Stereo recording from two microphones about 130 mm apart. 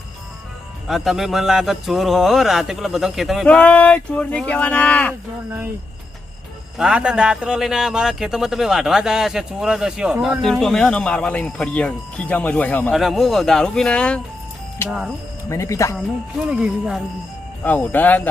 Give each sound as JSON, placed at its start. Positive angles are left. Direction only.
{"t": 0.9, "sound": "speech", "side_deg": 0}
{"t": 3.4, "sound": "speech", "side_deg": 10}
{"t": 6.7, "sound": "speech", "side_deg": -5}
{"t": 12.9, "sound": "speech", "side_deg": 0}
{"t": 14.8, "sound": "speech", "side_deg": -5}
{"t": 15.4, "sound": "speech", "side_deg": 25}
{"t": 16.0, "sound": "speech", "side_deg": -5}
{"t": 17.6, "sound": "speech", "side_deg": 10}